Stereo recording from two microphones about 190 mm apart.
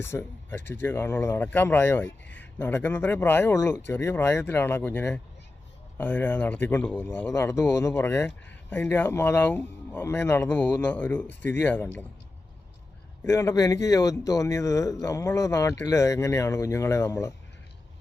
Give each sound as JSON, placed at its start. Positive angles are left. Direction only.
{"t": 0.0, "sound": "speech", "side_deg": 10}
{"t": 13.2, "sound": "speech", "side_deg": 15}